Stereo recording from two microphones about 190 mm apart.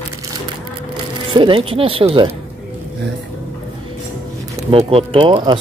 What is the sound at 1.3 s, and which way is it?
Speech, 25° right (ahead or behind).